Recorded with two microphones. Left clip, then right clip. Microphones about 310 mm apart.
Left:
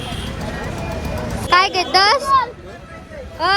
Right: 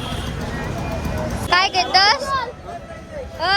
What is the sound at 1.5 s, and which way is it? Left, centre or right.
Speech, centre.